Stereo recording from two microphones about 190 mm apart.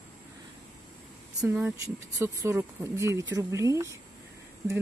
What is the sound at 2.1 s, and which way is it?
Speech, 15° right (ahead or behind).